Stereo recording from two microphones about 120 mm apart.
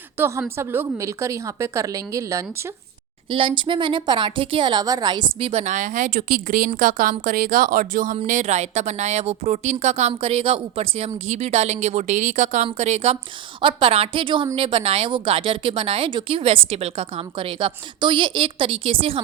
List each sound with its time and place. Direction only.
0.2 s a woman's voice: 20° right (ahead or behind)
3.2 s speech: 45° right (ahead or behind)
5.4 s a woman's voice: 50° right (ahead or behind)
5.6 s speech: 90° right
8.3 s a woman's voice: 70° right (ahead or behind); by 12.6 s 90° right
12.7 s a woman's voice: 65° right (ahead or behind)
13.6 s a woman's voice: 45° right (ahead or behind)